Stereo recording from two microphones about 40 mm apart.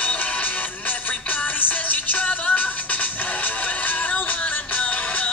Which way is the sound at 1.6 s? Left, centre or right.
Left.